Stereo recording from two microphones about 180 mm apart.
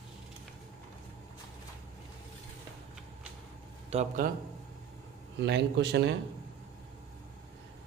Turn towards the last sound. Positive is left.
turn(degrees=-70)  # may be behind; listen again after turning